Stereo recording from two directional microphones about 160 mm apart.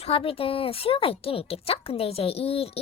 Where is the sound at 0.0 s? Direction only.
35° left (ahead or behind).